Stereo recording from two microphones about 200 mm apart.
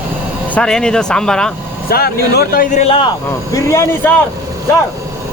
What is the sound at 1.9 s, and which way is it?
A man's voice, 50° left (ahead or behind).